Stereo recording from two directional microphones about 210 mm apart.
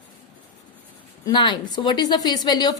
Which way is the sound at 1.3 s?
20° left (ahead or behind).